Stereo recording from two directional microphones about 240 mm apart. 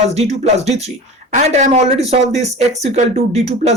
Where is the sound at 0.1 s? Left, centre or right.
Right.